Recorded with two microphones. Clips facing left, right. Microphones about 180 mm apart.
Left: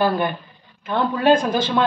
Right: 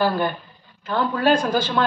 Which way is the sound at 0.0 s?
15° left (ahead or behind).